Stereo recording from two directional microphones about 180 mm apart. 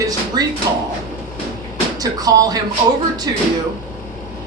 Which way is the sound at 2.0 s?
20° right (ahead or behind).